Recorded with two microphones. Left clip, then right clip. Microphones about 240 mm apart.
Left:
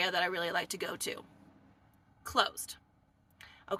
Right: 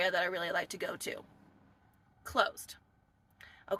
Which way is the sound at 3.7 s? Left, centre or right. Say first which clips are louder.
Right 1 dB; centre.